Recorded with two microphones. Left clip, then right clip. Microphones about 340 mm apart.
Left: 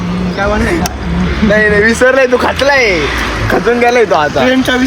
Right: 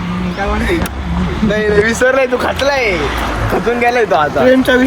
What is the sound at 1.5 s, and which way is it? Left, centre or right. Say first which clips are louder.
Speech: left 4 dB; left.